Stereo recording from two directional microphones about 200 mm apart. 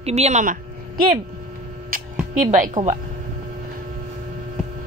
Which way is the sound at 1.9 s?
45° right (ahead or behind).